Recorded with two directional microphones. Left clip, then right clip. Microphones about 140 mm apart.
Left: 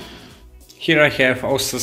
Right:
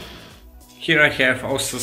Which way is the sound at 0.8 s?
35° left (ahead or behind).